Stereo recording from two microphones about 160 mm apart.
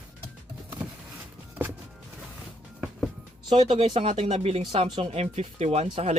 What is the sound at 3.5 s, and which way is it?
Speech, 30° right (ahead or behind).